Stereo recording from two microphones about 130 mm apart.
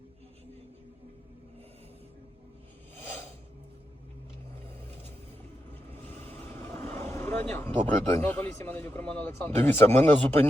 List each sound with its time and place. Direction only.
5.9 s vehicle: 15° left (ahead or behind)
7.9 s a man's voice: 15° left (ahead or behind)